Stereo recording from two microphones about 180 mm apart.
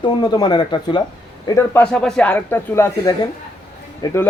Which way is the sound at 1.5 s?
10° left (ahead or behind).